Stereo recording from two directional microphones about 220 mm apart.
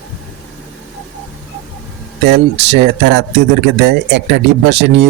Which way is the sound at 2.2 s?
50° right (ahead or behind).